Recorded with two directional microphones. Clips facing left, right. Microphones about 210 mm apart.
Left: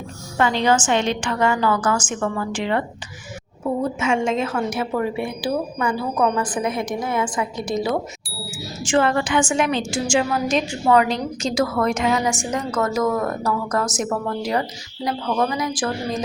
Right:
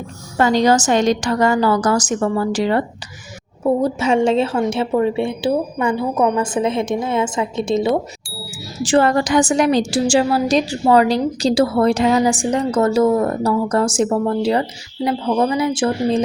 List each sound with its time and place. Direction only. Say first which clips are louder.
0.3 s a woman's voice: right 4 dB; 40° right (ahead or behind); by 7.9 s 25° right (ahead or behind)
8.8 s a woman's voice: right 4 dB; 35° right (ahead or behind)